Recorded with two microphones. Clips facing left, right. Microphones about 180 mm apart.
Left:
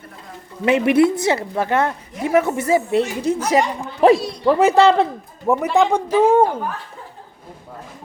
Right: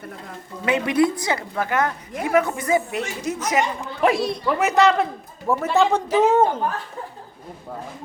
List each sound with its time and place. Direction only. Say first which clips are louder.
0.6 s a woman's voice: left 5 dB; 25° left (ahead or behind)
5.7 s a woman's voice: left 1 dB; 15° left (ahead or behind)